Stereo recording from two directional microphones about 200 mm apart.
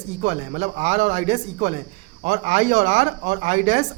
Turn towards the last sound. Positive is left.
turn(degrees=-35)  # may be behind; listen again after turning